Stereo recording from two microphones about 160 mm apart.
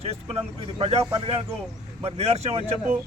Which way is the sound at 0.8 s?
40° right (ahead or behind).